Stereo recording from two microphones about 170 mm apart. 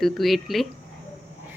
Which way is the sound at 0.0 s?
Centre (ahead or behind).